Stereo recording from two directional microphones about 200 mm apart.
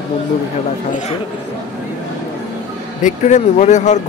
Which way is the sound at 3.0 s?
35° left (ahead or behind).